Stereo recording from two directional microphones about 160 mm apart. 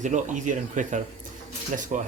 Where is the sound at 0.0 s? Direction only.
50° right (ahead or behind).